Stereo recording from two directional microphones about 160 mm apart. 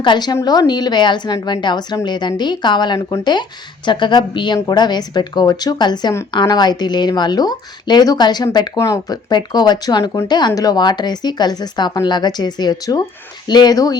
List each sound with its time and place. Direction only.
0.0 s a woman's voice: 30° left (ahead or behind)